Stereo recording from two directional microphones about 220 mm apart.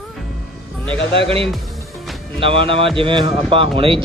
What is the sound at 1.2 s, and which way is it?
Speech, 25° right (ahead or behind).